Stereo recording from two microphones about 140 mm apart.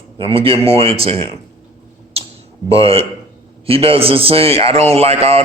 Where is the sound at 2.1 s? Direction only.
45° right (ahead or behind).